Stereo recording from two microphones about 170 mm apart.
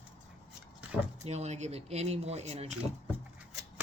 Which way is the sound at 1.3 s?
40° right (ahead or behind).